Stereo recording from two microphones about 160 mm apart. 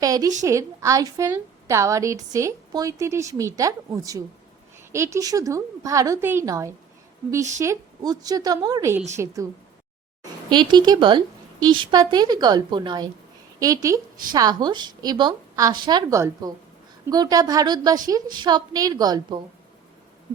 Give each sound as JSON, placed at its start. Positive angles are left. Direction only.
{"t": 0.0, "sound": "a woman's voice", "side_deg": -20}
{"t": 10.5, "sound": "a woman's voice", "side_deg": -30}